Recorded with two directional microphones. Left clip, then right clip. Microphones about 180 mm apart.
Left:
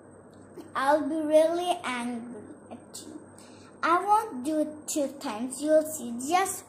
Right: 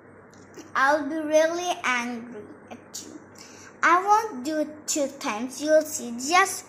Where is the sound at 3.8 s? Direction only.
Centre (ahead or behind).